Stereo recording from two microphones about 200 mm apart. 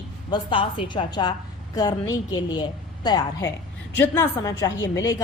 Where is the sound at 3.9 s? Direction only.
10° left (ahead or behind).